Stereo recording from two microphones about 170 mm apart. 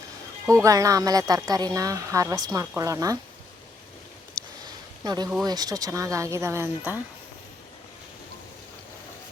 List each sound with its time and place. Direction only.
0.5 s speech: 20° right (ahead or behind)
4.4 s a sound: 25° right (ahead or behind)
5.5 s speech: 25° right (ahead or behind)